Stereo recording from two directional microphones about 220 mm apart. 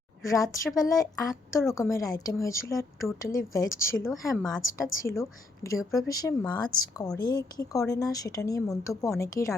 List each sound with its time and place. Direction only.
0.3 s a woman's voice: 15° left (ahead or behind)